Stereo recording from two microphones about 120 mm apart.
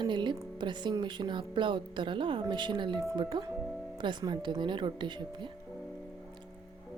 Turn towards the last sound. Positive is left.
turn(degrees=-40)  # may be behind; listen again after turning